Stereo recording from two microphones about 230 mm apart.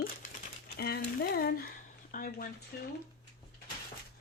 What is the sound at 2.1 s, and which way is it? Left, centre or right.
Speech, left.